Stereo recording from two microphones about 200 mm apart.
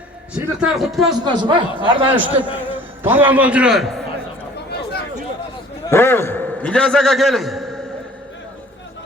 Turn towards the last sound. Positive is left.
turn(degrees=0)  # may be behind; listen again after turning